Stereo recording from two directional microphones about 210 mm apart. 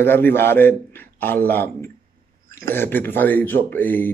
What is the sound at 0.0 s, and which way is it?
Speech, 10° left (ahead or behind).